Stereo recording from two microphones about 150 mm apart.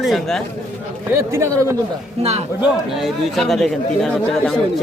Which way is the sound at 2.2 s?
45° right (ahead or behind).